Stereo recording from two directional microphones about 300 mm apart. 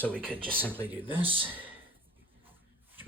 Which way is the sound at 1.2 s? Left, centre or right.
Centre.